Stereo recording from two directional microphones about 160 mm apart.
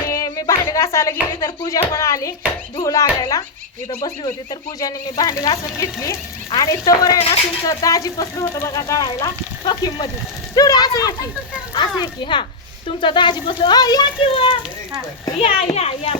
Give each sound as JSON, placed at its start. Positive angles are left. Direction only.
{"t": 0.1, "sound": "music", "side_deg": 20}
{"t": 1.4, "sound": "speech", "side_deg": 20}
{"t": 4.8, "sound": "speech", "side_deg": 20}